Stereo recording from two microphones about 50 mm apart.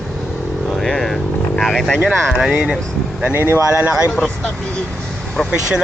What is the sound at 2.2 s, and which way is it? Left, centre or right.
Speech, centre.